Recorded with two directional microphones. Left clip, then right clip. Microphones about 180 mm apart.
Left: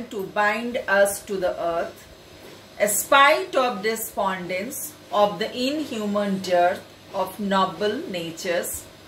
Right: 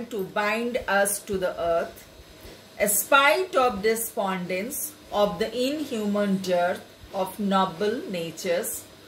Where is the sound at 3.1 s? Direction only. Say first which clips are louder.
Left 3 dB; 40° right (ahead or behind).